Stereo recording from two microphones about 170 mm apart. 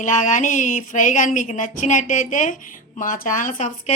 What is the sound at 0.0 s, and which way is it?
A woman's voice, 45° left (ahead or behind).